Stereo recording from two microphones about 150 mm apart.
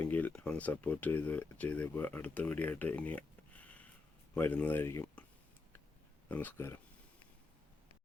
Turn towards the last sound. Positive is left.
turn(degrees=15)  # may be behind; listen again after turning